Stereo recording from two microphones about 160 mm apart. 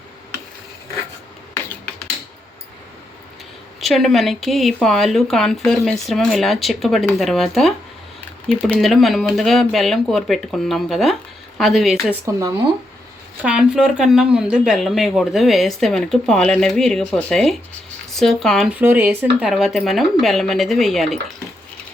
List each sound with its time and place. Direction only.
3.8 s speech: centre (ahead or behind)
12.2 s speech: 20° right (ahead or behind)
13.4 s speech: 5° right (ahead or behind)
18.8 s speech: 10° right (ahead or behind)